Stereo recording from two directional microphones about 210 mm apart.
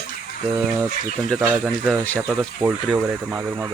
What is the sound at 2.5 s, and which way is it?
Speech, 5° right (ahead or behind).